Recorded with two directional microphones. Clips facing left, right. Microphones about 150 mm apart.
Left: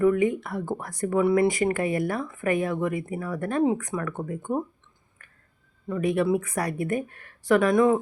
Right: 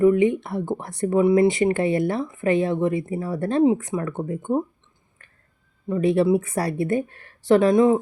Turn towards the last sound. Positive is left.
turn(degrees=-25)  # may be behind; listen again after turning